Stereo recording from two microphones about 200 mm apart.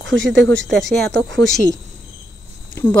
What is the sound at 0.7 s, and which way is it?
Speech, 5° left (ahead or behind).